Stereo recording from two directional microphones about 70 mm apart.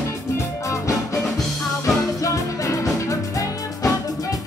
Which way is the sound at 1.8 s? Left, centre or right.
Left.